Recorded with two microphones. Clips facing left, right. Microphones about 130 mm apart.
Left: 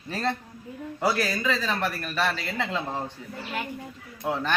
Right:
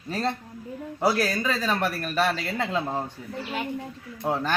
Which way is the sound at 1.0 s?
15° right (ahead or behind).